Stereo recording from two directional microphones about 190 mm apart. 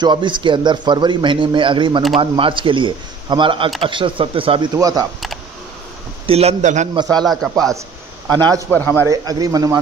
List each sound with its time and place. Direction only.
0.0 s a man's voice: 25° right (ahead or behind)
6.2 s a man's voice: 35° right (ahead or behind)
7.2 s a man's voice: centre (ahead or behind)
8.3 s a man's voice: 20° right (ahead or behind)
8.7 s speech: 10° left (ahead or behind)
9.0 s a man's voice: 20° right (ahead or behind)